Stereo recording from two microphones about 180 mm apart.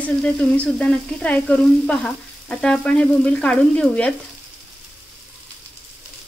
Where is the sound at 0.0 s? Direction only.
5° left (ahead or behind).